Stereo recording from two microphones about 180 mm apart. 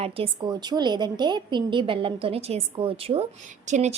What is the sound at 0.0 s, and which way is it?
A woman's voice, 30° right (ahead or behind).